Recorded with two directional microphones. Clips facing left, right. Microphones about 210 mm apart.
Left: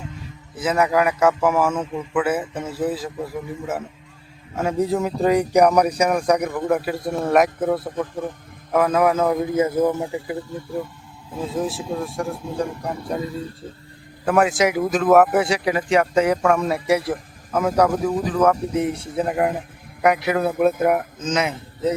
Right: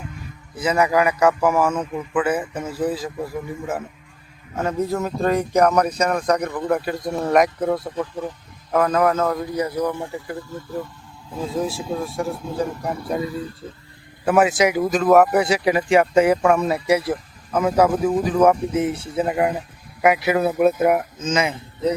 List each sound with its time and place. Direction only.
0.5 s a man's voice: centre (ahead or behind)
11.3 s speech: centre (ahead or behind)
15.6 s speech: 10° right (ahead or behind)